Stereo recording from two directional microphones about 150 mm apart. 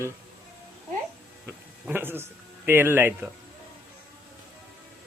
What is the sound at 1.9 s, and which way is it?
A man's voice, 15° right (ahead or behind).